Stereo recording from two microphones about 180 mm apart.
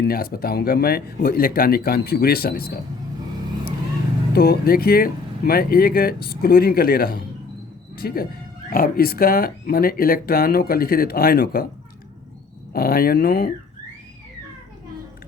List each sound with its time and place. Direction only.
0.0 s speech: 55° left (ahead or behind)
4.3 s speech: 60° left (ahead or behind)
12.7 s speech: 55° left (ahead or behind)